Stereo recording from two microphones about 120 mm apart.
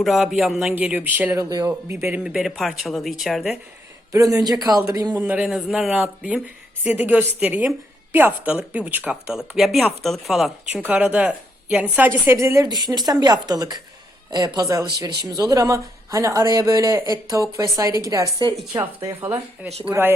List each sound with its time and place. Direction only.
0.0 s speech: centre (ahead or behind)
0.8 s speech: 10° right (ahead or behind)
1.4 s speech: 30° right (ahead or behind)
2.0 s speech: 5° right (ahead or behind)
4.1 s speech: 30° right (ahead or behind)
5.1 s speech: 10° right (ahead or behind)
12.6 s speech: 35° right (ahead or behind)
18.7 s speech: 15° right (ahead or behind)